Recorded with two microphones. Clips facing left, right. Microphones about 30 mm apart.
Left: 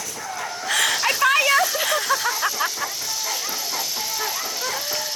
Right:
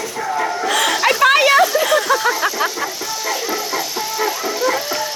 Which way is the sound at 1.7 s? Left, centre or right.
Centre.